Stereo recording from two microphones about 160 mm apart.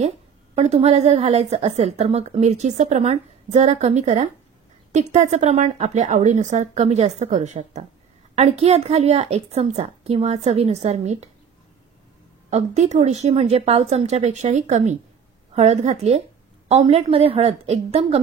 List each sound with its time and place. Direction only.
0.6 s a woman's voice: 40° right (ahead or behind)
12.4 s a woman's voice: 45° right (ahead or behind)